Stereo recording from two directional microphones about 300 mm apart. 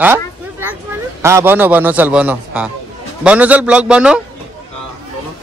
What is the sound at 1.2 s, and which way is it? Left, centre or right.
A man's voice, centre.